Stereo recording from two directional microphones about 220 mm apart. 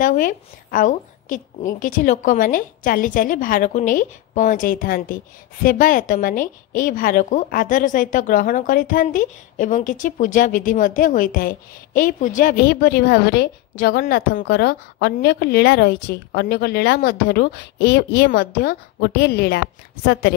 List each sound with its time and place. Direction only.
0.0 s a woman's voice: 40° left (ahead or behind)